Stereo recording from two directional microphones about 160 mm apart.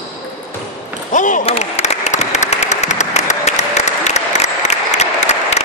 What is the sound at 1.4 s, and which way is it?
Applause, 40° left (ahead or behind).